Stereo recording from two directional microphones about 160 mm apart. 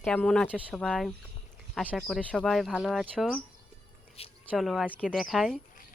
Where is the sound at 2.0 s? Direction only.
5° left (ahead or behind).